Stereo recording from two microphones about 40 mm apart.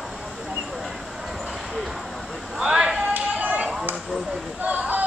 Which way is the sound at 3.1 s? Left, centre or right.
Right.